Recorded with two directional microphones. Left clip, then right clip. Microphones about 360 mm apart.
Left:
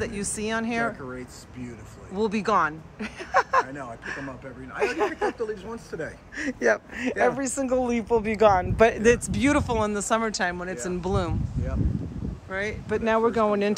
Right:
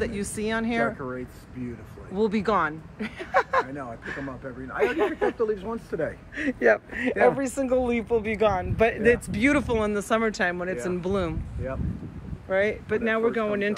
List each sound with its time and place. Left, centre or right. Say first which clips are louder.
0.0 s speech: right 1 dB; centre
2.1 s speech: left 1 dB; centre
5.4 s speech: right 5 dB; centre
6.3 s speech: right 2 dB; centre
12.4 s speech: right 5 dB; centre